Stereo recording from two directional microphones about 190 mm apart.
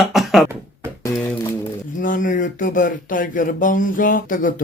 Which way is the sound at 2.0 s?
45° left (ahead or behind).